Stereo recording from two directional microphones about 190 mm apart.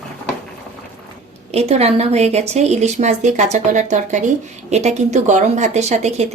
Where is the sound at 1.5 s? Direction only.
35° right (ahead or behind).